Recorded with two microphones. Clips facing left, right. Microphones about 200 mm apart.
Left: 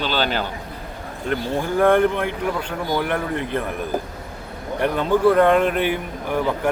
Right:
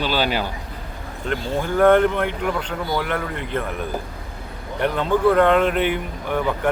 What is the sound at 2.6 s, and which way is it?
Speech, 10° left (ahead or behind).